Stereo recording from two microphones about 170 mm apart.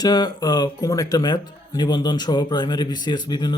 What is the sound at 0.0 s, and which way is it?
Speech, 25° left (ahead or behind).